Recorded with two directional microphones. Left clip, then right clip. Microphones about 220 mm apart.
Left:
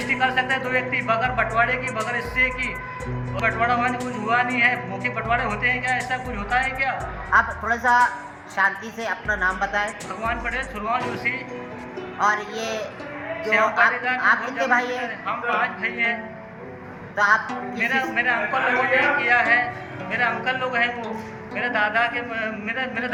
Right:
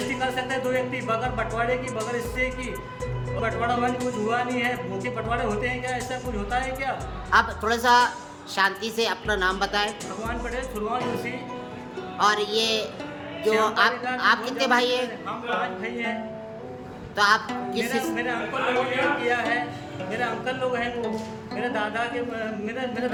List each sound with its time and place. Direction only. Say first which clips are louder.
0.1 s a woman's voice: left 9 dB; 20° right (ahead or behind)
17.2 s a woman's voice: left 2 dB; 25° right (ahead or behind)
17.8 s speech: left 9 dB; 15° right (ahead or behind)